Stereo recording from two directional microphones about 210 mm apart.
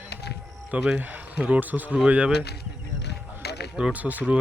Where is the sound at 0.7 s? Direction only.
5° right (ahead or behind).